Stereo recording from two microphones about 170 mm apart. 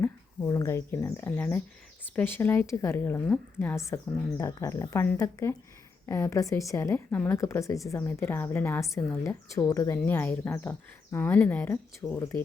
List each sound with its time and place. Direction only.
0.0 s a woman's voice: 20° left (ahead or behind)